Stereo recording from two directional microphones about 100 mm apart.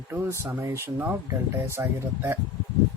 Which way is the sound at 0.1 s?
25° right (ahead or behind).